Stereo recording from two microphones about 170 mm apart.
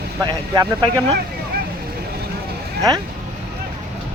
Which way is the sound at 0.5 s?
20° right (ahead or behind).